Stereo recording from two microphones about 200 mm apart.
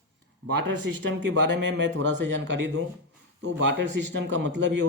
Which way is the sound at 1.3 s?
60° right (ahead or behind).